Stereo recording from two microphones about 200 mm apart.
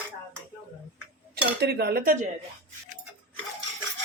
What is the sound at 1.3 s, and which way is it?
Cutlery, 55° right (ahead or behind).